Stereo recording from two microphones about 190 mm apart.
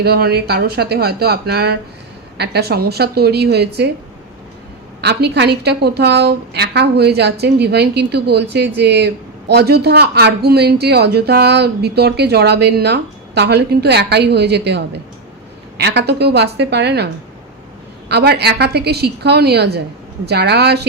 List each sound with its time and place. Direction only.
0.0 s speech: 55° right (ahead or behind)
4.9 s speech: 60° right (ahead or behind)
18.1 s speech: 60° right (ahead or behind)